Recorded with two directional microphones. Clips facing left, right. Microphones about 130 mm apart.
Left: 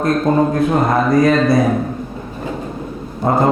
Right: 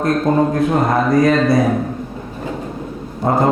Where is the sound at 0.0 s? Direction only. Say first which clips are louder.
Left 1 dB; 25° left (ahead or behind).